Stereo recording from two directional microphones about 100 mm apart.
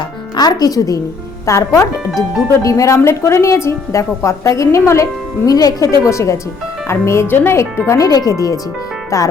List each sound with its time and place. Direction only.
0.3 s a woman's voice: 40° left (ahead or behind)
2.0 s speech: 5° right (ahead or behind)
2.6 s a woman's voice: 30° left (ahead or behind)